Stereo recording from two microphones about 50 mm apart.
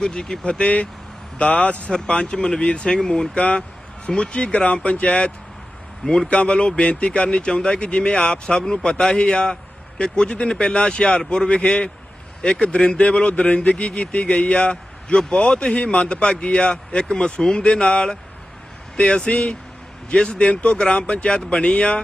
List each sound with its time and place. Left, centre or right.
0.0 s speech: centre
3.3 s speech: left